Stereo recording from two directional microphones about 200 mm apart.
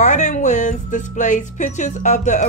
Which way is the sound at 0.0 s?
35° left (ahead or behind).